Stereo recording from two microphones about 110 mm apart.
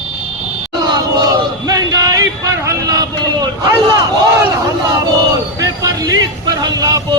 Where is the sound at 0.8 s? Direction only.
40° right (ahead or behind).